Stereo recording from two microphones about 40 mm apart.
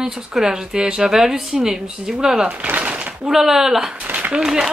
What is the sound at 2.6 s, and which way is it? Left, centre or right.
Speech, right.